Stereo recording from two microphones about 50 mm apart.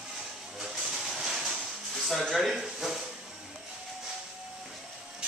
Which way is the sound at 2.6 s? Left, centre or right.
Centre.